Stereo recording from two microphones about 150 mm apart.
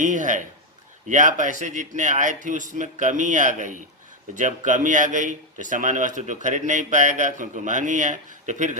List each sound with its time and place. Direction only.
0.0 s a man's voice: 55° right (ahead or behind)